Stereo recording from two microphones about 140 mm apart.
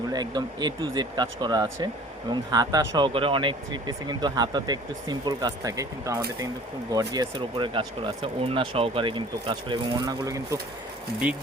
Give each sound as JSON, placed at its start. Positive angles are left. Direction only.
{"t": 0.1, "sound": "speech", "side_deg": -30}